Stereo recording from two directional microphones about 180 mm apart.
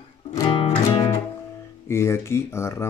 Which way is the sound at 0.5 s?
30° left (ahead or behind).